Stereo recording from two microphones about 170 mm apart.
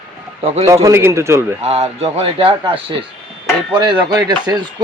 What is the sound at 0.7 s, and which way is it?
Speech, 20° right (ahead or behind).